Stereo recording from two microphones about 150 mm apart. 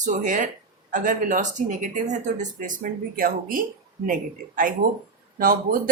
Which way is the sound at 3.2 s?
70° right (ahead or behind).